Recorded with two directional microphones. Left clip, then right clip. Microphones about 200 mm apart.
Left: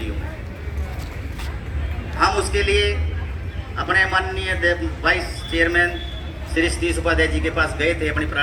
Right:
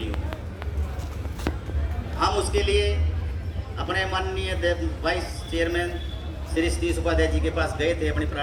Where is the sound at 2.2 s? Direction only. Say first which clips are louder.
Left 5 dB; 10° right (ahead or behind).